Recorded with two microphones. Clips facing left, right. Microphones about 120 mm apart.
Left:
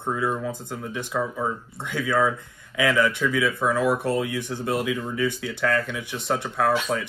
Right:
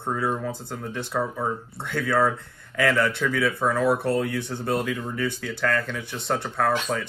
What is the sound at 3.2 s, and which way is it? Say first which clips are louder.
Speech: even; 5° left (ahead or behind).